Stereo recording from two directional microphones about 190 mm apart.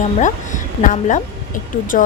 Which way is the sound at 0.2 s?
40° left (ahead or behind).